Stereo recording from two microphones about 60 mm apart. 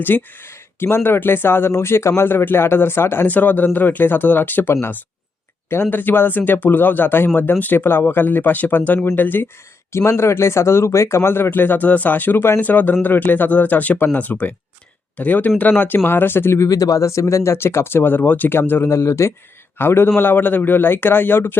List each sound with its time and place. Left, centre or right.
0.0 s a man's voice: left
3.2 s a man's voice: left
9.9 s speech: left
16.0 s a man's voice: left
16.6 s speech: left
19.8 s a man's voice: left